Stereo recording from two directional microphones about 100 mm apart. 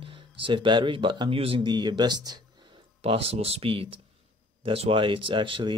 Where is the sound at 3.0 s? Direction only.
80° right; by 5.7 s 55° right (ahead or behind).